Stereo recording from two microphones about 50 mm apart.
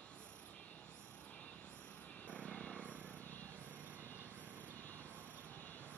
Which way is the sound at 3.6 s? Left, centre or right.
Right.